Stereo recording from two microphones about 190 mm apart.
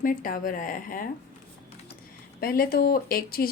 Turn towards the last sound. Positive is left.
turn(degrees=50)  # may be behind; listen again after turning